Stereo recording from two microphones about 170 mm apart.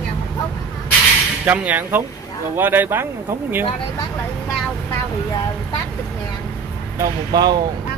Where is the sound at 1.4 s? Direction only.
10° right (ahead or behind).